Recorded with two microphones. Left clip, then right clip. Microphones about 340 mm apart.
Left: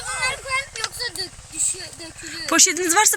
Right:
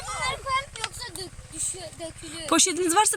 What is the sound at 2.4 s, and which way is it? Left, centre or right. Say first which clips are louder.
Speech: left 4 dB; centre.